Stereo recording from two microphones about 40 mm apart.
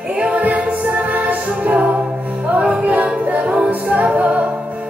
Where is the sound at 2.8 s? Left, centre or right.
Right.